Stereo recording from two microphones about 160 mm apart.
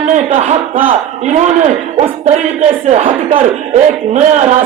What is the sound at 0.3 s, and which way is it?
Speech, 45° right (ahead or behind).